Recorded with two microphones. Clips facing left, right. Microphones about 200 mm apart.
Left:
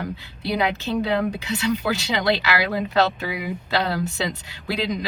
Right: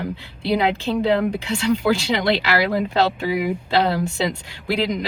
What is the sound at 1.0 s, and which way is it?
Speech, 30° right (ahead or behind).